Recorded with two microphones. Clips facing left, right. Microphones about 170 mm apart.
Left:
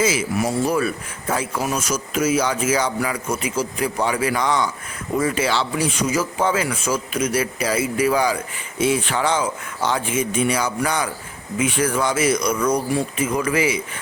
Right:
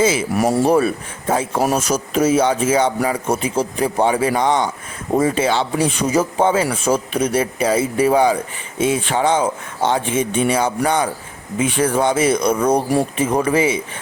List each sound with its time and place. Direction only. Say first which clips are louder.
0.0 s a man's voice: right 4 dB; 30° right (ahead or behind)
12.7 s speech: right 4 dB; 55° right (ahead or behind)
13.1 s speech: right 4 dB; 30° right (ahead or behind)